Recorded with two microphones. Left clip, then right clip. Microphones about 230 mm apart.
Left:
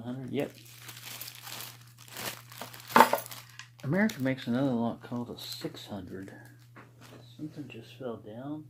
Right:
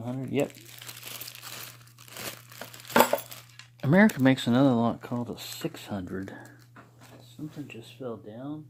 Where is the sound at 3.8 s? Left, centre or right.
Right.